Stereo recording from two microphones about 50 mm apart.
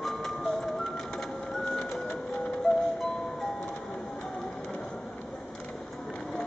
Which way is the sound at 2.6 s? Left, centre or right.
Centre.